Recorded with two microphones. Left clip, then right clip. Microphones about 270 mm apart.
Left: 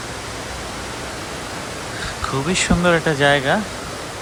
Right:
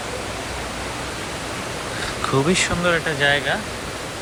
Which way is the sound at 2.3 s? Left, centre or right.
Centre.